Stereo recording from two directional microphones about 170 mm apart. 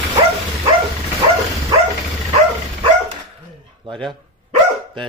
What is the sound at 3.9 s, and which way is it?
Speech, 30° right (ahead or behind).